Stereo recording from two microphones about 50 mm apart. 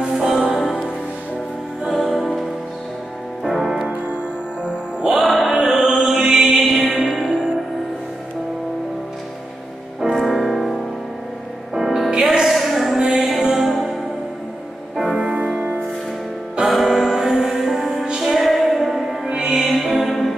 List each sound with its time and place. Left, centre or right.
0.0 s music: centre
0.6 s music: centre
1.9 s music: centre
3.4 s music: centre
5.0 s mantra: centre
7.2 s music: centre
10.1 s music: centre
15.1 s music: centre
16.6 s music: centre
19.2 s music: centre
19.6 s music: centre